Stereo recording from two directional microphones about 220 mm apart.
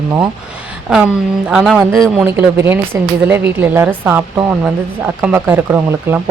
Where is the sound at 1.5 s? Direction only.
Centre (ahead or behind).